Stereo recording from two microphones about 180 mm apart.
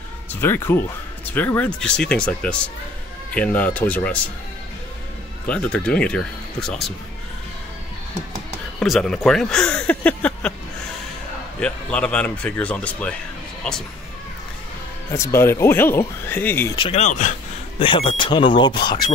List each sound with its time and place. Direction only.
0.3 s speech: 10° left (ahead or behind)
5.5 s speech: 5° left (ahead or behind)
8.7 s speech: centre (ahead or behind)
11.6 s speech: 5° left (ahead or behind)
15.0 s speech: 15° left (ahead or behind)
16.7 s speech: 25° left (ahead or behind)
17.0 s speech: 45° left (ahead or behind)
17.7 s speech: 30° left (ahead or behind)